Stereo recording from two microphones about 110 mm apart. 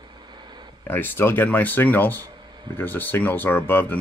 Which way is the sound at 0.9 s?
20° left (ahead or behind).